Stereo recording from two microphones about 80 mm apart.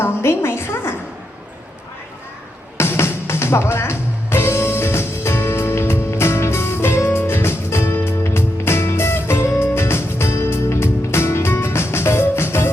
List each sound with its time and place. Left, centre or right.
0.0 s music: left
2.7 s music: left